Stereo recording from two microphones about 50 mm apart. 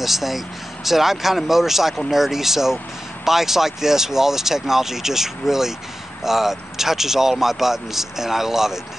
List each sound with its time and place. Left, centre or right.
0.0 s speech: centre